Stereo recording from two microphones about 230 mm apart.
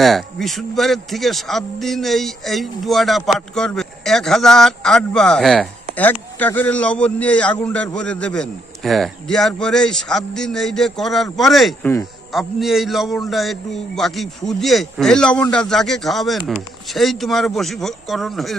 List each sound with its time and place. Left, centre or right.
0.0 s speech: centre